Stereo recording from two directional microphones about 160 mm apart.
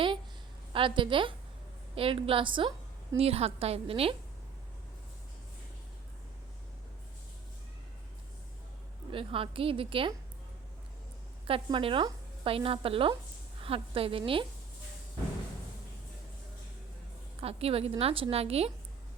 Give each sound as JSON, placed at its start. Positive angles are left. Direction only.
{"t": 0.7, "sound": "a woman's voice", "side_deg": -30}
{"t": 9.1, "sound": "a woman's voice", "side_deg": -35}
{"t": 11.4, "sound": "a woman's voice", "side_deg": -35}
{"t": 17.4, "sound": "a woman's voice", "side_deg": -40}